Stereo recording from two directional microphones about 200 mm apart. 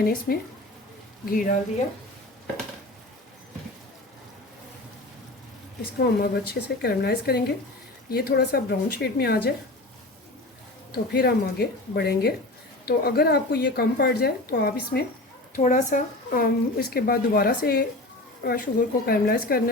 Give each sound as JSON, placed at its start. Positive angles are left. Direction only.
{"t": 0.0, "sound": "speech", "side_deg": 50}
{"t": 5.8, "sound": "speech", "side_deg": 55}
{"t": 10.9, "sound": "speech", "side_deg": 50}
{"t": 15.5, "sound": "speech", "side_deg": 40}